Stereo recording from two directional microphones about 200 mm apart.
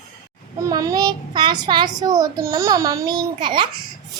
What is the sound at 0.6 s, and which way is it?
Child singing, 20° right (ahead or behind).